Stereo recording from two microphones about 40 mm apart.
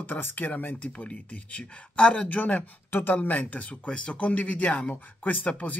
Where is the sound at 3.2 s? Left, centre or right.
Left.